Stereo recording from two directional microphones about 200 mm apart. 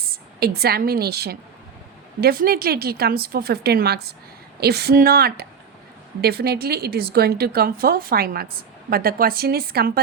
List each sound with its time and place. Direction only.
0.0 s a woman's voice: 50° right (ahead or behind)